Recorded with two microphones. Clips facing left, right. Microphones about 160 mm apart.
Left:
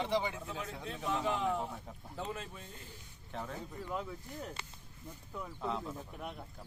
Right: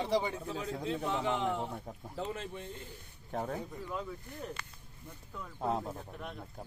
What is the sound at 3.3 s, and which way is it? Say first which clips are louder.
Speech: right 6 dB; 45° right (ahead or behind).